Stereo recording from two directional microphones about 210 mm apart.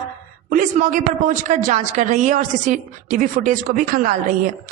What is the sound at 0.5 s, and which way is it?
A woman's voice, 40° right (ahead or behind).